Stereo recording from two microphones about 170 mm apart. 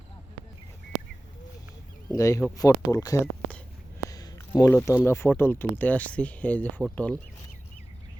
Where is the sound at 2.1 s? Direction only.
20° left (ahead or behind).